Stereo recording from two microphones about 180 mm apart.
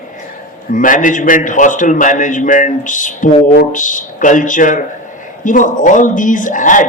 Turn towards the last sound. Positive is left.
turn(degrees=45)  # may be behind; listen again after turning